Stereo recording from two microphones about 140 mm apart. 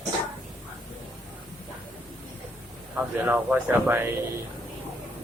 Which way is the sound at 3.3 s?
15° right (ahead or behind).